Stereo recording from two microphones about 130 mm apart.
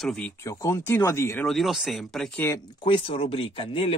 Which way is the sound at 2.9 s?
45° left (ahead or behind).